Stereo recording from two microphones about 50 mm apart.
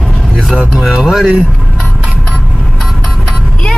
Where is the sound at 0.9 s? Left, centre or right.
Centre.